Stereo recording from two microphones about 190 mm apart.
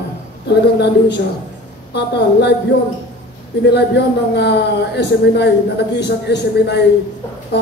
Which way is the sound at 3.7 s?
65° left (ahead or behind).